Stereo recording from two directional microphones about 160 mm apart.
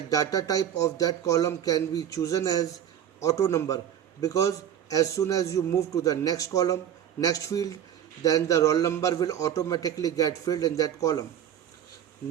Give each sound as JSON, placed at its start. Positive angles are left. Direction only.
{"t": 0.1, "sound": "a man's voice", "side_deg": 20}